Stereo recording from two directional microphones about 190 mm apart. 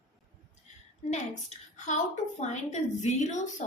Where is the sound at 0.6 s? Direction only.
35° left (ahead or behind).